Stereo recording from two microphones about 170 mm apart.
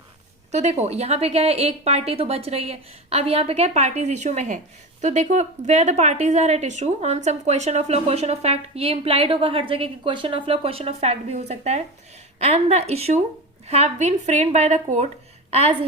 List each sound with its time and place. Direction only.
0.5 s a woman's voice: 40° right (ahead or behind)